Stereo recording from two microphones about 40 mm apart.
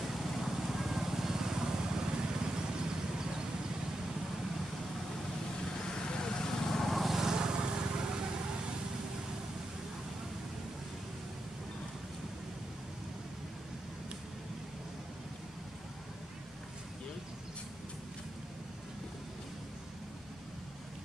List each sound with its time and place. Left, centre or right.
0.3 s vehicle: centre
5.8 s vehicle: centre
6.9 s vehicle: centre
7.2 s vehicle: centre